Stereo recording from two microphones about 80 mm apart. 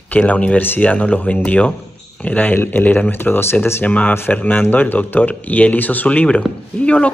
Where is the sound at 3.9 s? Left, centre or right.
Centre.